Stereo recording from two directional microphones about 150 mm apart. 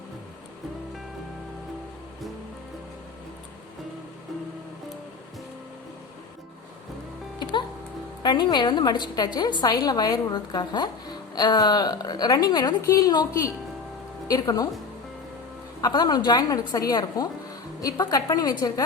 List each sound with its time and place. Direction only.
8.2 s a woman's voice: 30° left (ahead or behind)
15.8 s a woman's voice: 25° left (ahead or behind)